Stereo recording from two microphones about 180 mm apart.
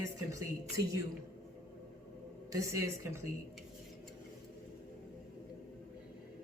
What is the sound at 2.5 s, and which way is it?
Speech, 15° right (ahead or behind).